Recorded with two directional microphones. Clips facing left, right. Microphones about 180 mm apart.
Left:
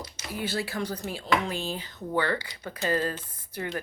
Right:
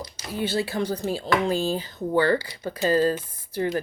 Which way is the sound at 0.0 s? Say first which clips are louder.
Right 5 dB; 30° right (ahead or behind).